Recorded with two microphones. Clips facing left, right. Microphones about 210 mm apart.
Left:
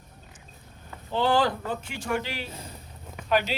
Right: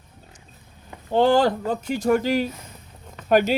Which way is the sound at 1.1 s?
45° right (ahead or behind).